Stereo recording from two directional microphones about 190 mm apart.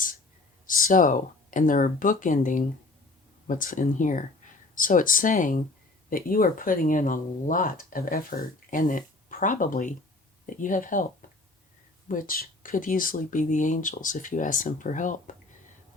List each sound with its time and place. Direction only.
0.7 s speech: 45° left (ahead or behind)
11.2 s a sound: 45° left (ahead or behind)
12.0 s speech: 45° left (ahead or behind)